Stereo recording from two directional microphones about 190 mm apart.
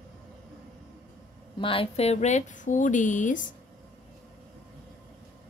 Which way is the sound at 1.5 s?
30° left (ahead or behind).